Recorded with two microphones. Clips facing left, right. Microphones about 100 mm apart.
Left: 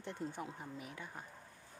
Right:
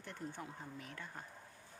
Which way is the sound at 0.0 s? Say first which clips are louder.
Left 4 dB; 20° left (ahead or behind).